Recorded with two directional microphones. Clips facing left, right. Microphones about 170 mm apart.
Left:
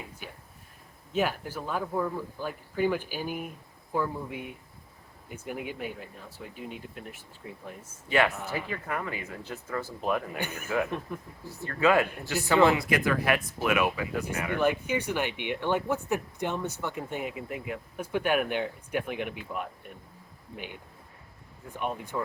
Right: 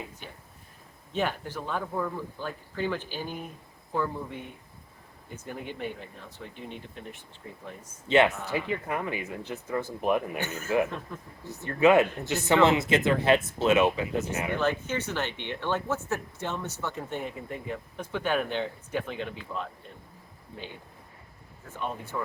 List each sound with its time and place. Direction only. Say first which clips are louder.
1.1 s speech: left 1 dB; 5° left (ahead or behind)
8.0 s speech: right 4 dB; 20° right (ahead or behind)
10.4 s speech: right 3 dB; 15° left (ahead or behind)
11.4 s speech: right 3 dB; 20° right (ahead or behind)
14.5 s speech: left 3 dB; 15° left (ahead or behind)
21.7 s speech: left 1 dB; 15° left (ahead or behind)